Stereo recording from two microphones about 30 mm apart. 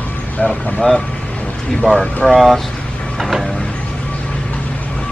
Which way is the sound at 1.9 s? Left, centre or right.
Left.